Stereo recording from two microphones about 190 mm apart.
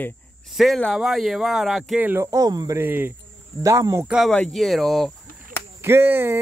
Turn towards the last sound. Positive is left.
turn(degrees=-10)  # may be behind; listen again after turning